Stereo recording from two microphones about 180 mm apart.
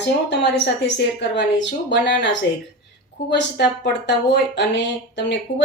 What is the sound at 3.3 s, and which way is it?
Speech, 75° left (ahead or behind).